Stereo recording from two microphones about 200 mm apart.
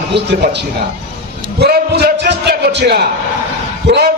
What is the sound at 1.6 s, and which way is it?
A man's voice, 55° right (ahead or behind).